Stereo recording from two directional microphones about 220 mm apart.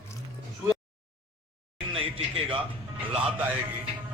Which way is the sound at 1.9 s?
25° right (ahead or behind).